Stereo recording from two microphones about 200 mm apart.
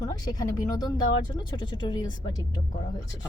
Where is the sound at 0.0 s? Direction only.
15° left (ahead or behind).